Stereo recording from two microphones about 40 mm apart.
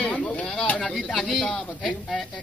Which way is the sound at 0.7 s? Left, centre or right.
Centre.